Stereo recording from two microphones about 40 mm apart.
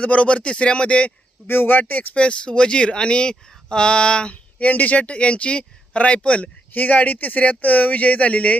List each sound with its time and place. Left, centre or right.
0.0 s a man's voice: left
1.5 s speech: left
2.1 s speech: left
4.5 s a man's voice: left